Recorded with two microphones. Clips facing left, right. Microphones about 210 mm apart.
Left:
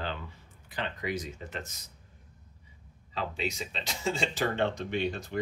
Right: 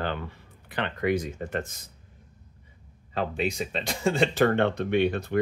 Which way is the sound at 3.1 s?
55° right (ahead or behind).